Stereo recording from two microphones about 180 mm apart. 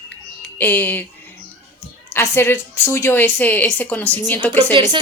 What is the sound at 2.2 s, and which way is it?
Speech, 15° left (ahead or behind).